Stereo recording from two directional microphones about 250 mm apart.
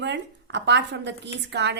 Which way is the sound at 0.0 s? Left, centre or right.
Right.